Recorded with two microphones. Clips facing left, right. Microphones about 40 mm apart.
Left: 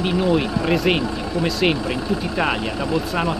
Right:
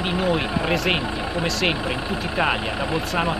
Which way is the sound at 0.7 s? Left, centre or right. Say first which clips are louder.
Left 4 dB; centre.